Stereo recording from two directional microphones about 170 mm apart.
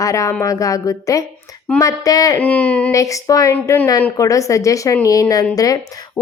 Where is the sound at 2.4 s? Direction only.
10° left (ahead or behind).